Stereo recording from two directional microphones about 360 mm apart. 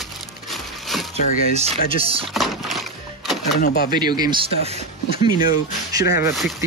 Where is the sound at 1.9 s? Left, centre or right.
Centre.